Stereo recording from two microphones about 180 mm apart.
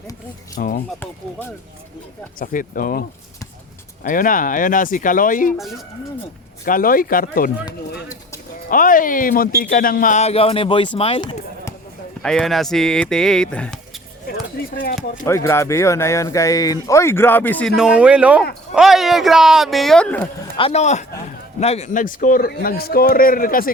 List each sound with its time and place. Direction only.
0.5 s speech: 50° left (ahead or behind)
2.4 s speech: 50° left (ahead or behind)
4.0 s speech: 50° left (ahead or behind)
5.5 s speech: centre (ahead or behind)
6.7 s speech: 50° left (ahead or behind)
8.7 s a man's voice: 50° left (ahead or behind); by 11.3 s 30° left (ahead or behind)
12.2 s speech: 5° left (ahead or behind)
15.3 s speech: 15° left (ahead or behind)
17.7 s speech: 5° right (ahead or behind)
20.6 s a man's voice: 35° left (ahead or behind); by 23.7 s 50° left (ahead or behind)